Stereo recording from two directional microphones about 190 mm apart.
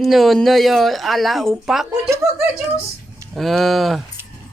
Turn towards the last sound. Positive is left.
turn(degrees=0)  # may be behind; listen again after turning